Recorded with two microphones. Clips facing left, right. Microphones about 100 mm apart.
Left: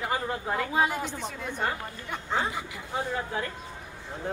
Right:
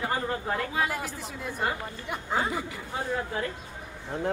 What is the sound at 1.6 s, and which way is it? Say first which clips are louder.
Speech: right 1 dB; 5° right (ahead or behind).